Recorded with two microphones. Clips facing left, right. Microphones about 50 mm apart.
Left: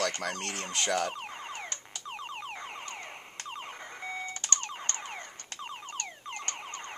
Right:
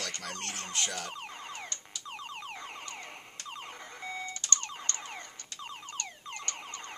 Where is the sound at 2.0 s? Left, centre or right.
Left.